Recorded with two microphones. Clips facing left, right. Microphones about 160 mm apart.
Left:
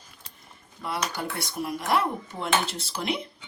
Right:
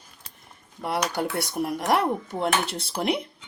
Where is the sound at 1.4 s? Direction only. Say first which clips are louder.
Right 4 dB; 65° right (ahead or behind).